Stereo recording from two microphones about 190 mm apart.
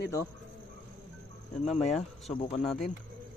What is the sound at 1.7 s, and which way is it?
Speech, 35° left (ahead or behind).